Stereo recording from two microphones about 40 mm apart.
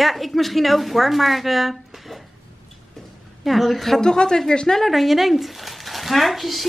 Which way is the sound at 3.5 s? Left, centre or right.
Centre.